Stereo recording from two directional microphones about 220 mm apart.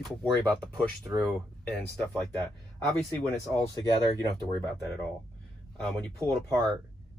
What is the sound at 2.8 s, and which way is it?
Speech, centre (ahead or behind).